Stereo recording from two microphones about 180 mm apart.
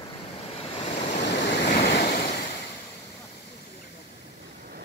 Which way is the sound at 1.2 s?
70° left (ahead or behind).